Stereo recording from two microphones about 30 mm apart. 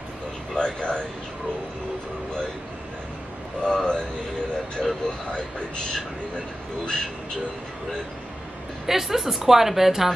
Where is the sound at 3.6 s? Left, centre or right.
Left.